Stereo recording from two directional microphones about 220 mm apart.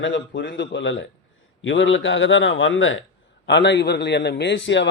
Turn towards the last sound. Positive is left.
turn(degrees=55)  # may be behind; listen again after turning